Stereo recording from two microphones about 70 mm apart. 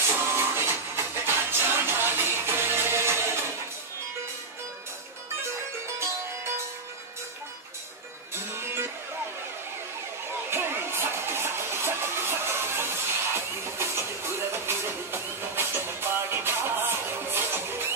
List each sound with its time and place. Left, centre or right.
0.0 s music: right
5.9 s music: right
8.4 s music: right
10.5 s music: right